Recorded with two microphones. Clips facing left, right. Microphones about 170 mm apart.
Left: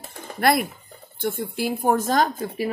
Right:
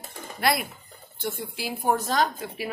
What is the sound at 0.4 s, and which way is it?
A woman's voice, 50° left (ahead or behind).